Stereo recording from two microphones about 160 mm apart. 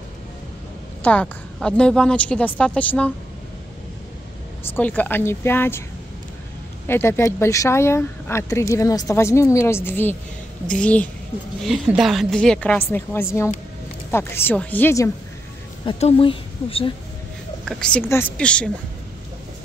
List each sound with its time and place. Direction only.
1.0 s speech: 5° left (ahead or behind)
4.7 s speech: 10° left (ahead or behind)
6.9 s speech: 15° left (ahead or behind)
16.0 s speech: 40° left (ahead or behind)
17.6 s speech: 5° left (ahead or behind)